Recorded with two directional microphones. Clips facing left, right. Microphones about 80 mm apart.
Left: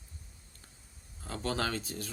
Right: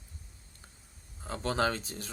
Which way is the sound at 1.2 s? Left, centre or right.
Right.